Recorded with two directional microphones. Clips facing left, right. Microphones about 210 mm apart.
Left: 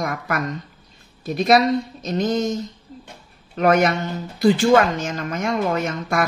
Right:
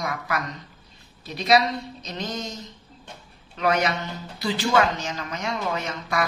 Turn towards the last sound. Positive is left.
turn(degrees=50)  # may be behind; listen again after turning